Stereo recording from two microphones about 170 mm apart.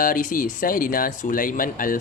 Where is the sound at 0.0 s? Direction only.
50° left (ahead or behind).